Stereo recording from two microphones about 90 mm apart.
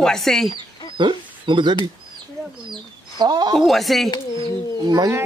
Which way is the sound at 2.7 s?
55° right (ahead or behind).